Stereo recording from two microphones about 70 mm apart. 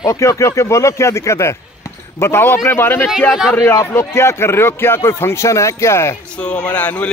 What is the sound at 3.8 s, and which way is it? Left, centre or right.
Speech, left.